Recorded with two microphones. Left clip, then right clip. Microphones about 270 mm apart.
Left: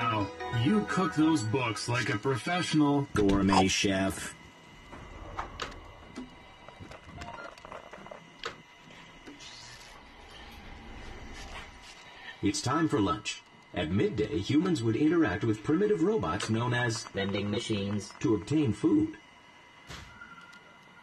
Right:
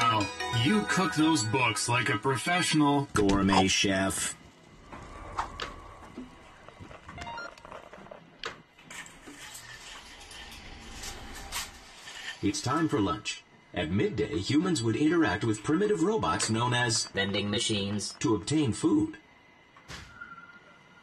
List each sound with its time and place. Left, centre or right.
0.2 s music: right
0.7 s speech: right
3.3 s speech: centre
7.2 s a sound: centre
8.4 s printer: centre
12.4 s speech: centre